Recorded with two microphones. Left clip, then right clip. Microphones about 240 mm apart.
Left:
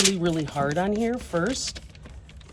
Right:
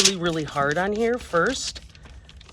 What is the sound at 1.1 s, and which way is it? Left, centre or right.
Speech, right.